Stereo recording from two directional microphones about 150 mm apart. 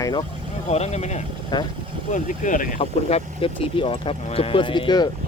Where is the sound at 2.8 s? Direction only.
40° left (ahead or behind).